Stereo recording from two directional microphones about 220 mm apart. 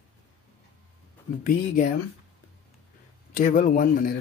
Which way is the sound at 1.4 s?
35° left (ahead or behind).